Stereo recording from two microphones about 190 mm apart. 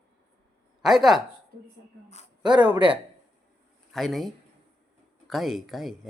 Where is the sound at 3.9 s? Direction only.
Centre (ahead or behind).